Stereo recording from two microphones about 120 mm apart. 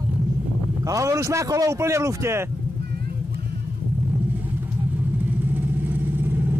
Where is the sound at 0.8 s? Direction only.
25° right (ahead or behind).